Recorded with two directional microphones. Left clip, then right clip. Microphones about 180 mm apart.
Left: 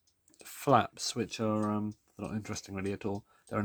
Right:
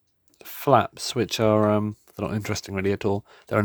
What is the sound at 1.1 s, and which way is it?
Speech, 55° right (ahead or behind).